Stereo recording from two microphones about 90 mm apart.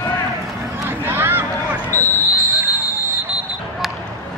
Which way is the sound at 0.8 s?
25° right (ahead or behind).